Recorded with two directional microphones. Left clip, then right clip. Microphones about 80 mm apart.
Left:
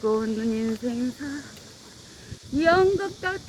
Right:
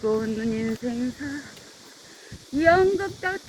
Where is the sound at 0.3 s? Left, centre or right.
Left.